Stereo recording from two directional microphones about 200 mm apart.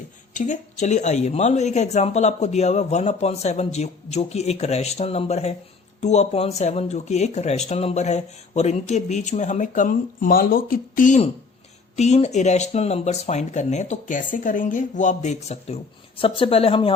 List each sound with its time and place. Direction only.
0.3 s speech: 40° left (ahead or behind)